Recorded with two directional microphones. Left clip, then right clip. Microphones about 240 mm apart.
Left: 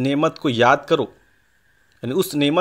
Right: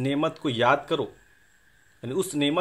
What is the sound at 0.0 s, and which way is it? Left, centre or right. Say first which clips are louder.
A man's voice: left 7 dB; left.